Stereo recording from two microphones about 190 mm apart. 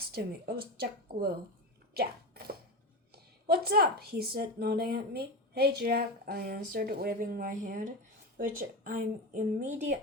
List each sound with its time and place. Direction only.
0.0 s speech: 55° right (ahead or behind)
1.9 s a sound: 55° right (ahead or behind)
3.4 s speech: 55° right (ahead or behind)